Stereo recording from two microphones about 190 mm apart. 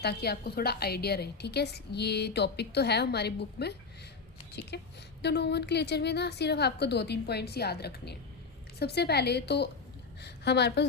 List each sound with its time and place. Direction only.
0.0 s a woman's voice: 60° left (ahead or behind)